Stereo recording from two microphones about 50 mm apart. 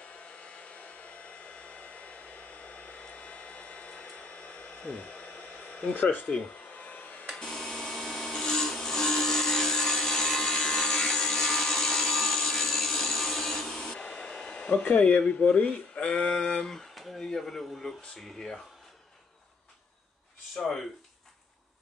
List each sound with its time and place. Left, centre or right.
0.2 s hair dryer: left
6.8 s a sound: left
7.3 s wood: centre
17.3 s speech: centre
20.5 s speech: centre